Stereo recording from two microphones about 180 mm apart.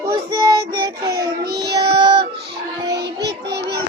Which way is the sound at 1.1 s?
60° right (ahead or behind).